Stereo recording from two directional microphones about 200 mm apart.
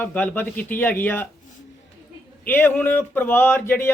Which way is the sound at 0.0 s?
10° left (ahead or behind).